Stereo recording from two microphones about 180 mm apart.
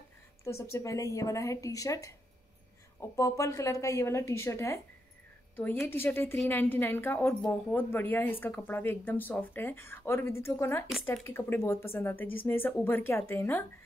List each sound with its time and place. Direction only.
0.4 s a woman's voice: 15° left (ahead or behind)